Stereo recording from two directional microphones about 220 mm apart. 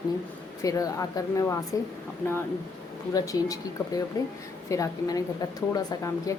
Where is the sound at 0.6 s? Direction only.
15° left (ahead or behind).